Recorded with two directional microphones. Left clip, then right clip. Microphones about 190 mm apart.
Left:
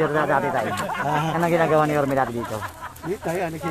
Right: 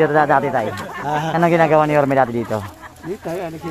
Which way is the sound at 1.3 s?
65° right (ahead or behind).